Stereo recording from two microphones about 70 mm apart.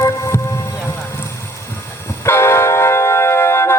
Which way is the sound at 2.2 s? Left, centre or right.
Left.